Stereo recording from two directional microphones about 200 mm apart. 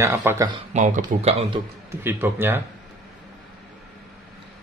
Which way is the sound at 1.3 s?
30° right (ahead or behind).